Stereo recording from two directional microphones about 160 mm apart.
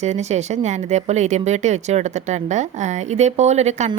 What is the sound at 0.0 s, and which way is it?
A woman's voice, 45° right (ahead or behind).